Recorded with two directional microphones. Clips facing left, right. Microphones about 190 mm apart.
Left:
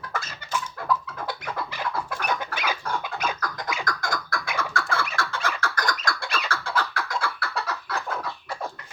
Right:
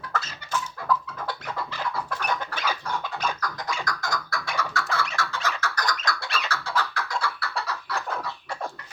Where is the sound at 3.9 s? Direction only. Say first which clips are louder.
Left 1 dB; 50° left (ahead or behind).